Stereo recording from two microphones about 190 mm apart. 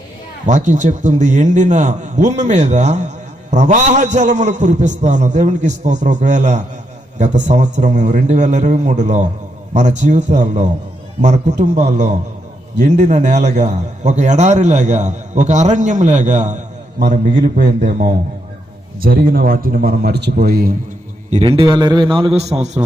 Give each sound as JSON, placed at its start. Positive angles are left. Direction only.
{"t": 0.4, "sound": "a man's voice", "side_deg": -40}
{"t": 17.4, "sound": "a man's voice", "side_deg": -55}
{"t": 21.2, "sound": "a man's voice", "side_deg": -35}